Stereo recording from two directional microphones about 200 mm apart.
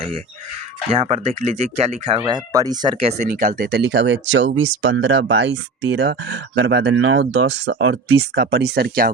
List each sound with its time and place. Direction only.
0.9 s speech: 30° right (ahead or behind)
2.2 s speech: 20° right (ahead or behind)
3.1 s speech: 40° right (ahead or behind); by 7.2 s 90° right
7.2 s speech: 55° right (ahead or behind)
8.4 s speech: 55° right (ahead or behind)